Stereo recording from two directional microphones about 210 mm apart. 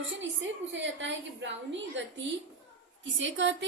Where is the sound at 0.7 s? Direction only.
60° right (ahead or behind).